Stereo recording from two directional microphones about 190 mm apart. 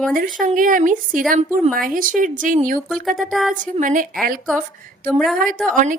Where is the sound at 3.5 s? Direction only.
45° right (ahead or behind).